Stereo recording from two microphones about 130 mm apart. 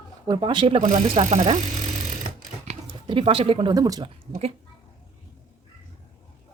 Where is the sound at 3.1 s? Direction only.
40° right (ahead or behind).